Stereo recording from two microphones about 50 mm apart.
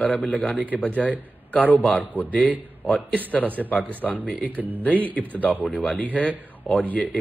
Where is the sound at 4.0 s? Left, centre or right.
Left.